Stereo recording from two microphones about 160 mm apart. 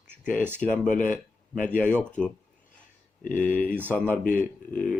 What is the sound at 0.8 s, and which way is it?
Speech, 55° left (ahead or behind).